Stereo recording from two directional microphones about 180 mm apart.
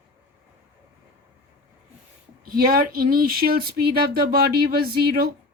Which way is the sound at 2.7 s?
55° right (ahead or behind).